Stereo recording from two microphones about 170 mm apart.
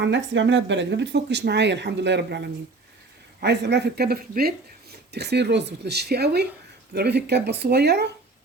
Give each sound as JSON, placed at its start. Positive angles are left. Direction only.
{"t": 0.0, "sound": "speech", "side_deg": -90}